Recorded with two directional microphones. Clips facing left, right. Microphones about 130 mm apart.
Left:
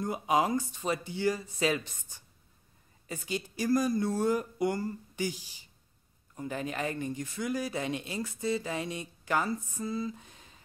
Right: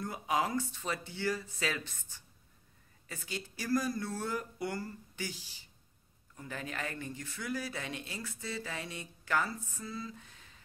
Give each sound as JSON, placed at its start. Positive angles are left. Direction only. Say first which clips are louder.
{"t": 0.0, "sound": "speech", "louder": "left 5 dB", "side_deg": 20}